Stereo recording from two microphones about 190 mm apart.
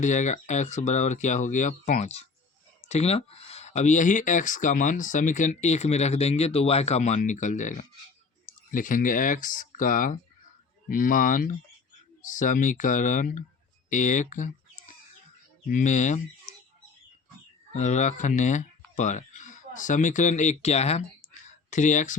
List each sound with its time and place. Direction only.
0.0 s speech: 40° left (ahead or behind)
15.7 s speech: 40° left (ahead or behind)
17.7 s speech: 40° left (ahead or behind)